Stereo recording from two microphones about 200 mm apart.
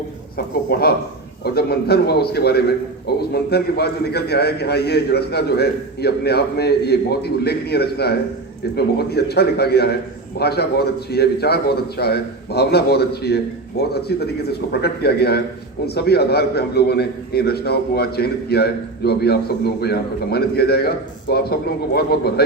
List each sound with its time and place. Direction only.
0.3 s a man's voice: 50° left (ahead or behind)